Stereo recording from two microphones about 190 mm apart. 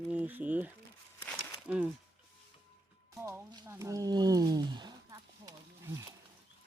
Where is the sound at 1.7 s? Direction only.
5° right (ahead or behind).